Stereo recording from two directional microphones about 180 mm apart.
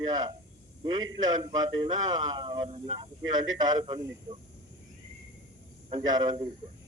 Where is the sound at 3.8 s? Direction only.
25° right (ahead or behind).